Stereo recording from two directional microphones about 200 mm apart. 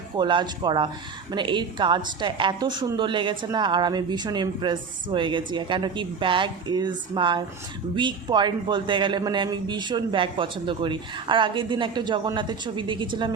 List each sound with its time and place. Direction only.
0.2 s speech: 20° right (ahead or behind)